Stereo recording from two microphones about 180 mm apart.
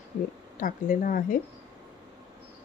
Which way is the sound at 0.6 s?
50° left (ahead or behind).